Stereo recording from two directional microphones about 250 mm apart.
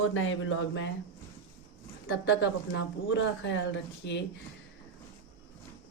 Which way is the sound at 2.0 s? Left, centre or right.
Left.